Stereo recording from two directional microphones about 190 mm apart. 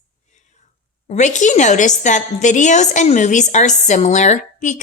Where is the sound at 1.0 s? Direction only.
40° left (ahead or behind).